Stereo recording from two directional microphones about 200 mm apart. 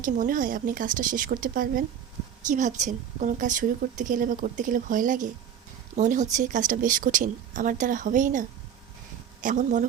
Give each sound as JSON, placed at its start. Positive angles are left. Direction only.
{"t": 0.0, "sound": "a woman's voice", "side_deg": -40}